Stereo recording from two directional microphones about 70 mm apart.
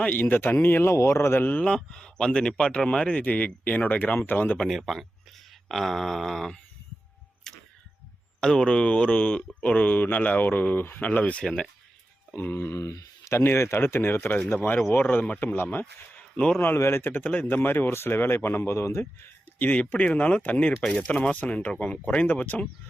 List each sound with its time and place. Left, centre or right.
0.0 s speech: left
1.6 s speech: centre
3.2 s speech: left
4.5 s speech: centre
4.8 s wail: centre
7.5 s tick-tock: centre
8.4 s speech: centre
11.4 s speech: centre
12.3 s speech: left
19.5 s speech: left